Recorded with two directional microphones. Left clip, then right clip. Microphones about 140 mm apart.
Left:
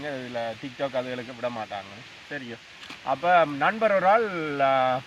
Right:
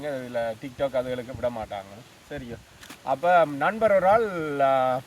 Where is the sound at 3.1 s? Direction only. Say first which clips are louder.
Right 1 dB; 25° right (ahead or behind).